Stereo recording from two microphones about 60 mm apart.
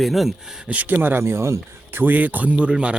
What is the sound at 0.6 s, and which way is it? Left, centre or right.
Speech, right.